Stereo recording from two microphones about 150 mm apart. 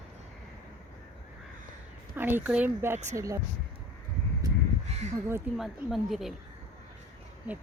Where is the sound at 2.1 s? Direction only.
15° right (ahead or behind).